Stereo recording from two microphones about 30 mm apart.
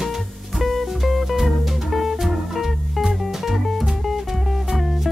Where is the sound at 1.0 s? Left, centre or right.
Centre.